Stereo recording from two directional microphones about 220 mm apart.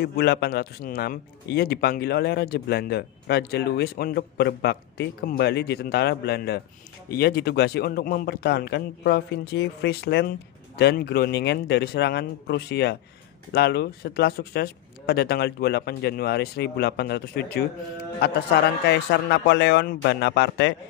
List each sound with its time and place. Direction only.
0.0 s a man's voice: 45° left (ahead or behind)